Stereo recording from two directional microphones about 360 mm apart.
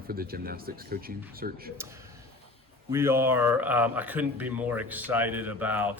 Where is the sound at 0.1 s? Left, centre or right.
Right.